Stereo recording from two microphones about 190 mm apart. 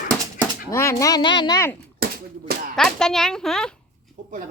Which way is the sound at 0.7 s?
15° left (ahead or behind).